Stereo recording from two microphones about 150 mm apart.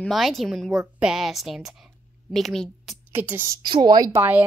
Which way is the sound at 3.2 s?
15° right (ahead or behind).